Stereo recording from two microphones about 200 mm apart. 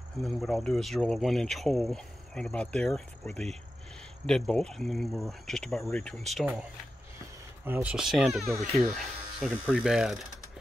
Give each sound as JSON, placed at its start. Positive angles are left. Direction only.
{"t": 0.2, "sound": "speech", "side_deg": 0}
{"t": 7.6, "sound": "speech", "side_deg": -10}